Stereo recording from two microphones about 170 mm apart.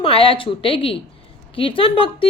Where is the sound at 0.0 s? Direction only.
35° left (ahead or behind).